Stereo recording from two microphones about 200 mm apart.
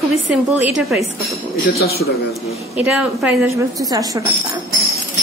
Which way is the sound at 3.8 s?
15° right (ahead or behind).